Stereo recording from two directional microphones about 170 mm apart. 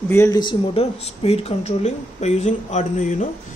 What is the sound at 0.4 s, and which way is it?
A man's voice, 30° left (ahead or behind).